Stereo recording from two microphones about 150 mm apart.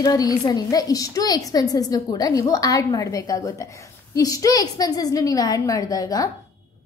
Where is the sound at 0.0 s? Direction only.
25° left (ahead or behind).